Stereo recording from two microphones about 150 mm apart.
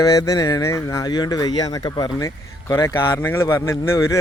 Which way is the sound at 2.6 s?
15° left (ahead or behind).